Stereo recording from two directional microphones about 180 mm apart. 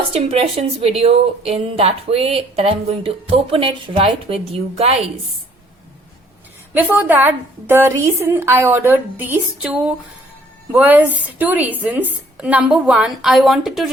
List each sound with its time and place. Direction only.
0.1 s a woman's voice: 35° right (ahead or behind)
6.7 s a woman's voice: 10° right (ahead or behind)